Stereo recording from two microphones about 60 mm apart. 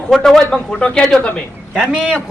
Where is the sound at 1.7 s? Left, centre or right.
Centre.